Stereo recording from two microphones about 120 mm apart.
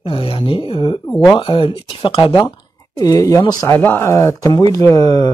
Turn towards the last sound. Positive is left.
turn(degrees=35)  # may be behind; listen again after turning